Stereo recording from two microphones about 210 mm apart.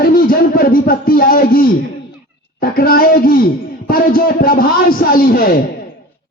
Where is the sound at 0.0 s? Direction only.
45° left (ahead or behind).